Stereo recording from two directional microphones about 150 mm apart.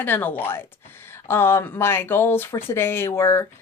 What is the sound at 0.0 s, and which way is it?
Speech, 10° left (ahead or behind).